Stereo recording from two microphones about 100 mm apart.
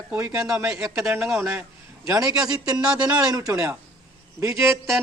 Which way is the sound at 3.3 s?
35° right (ahead or behind).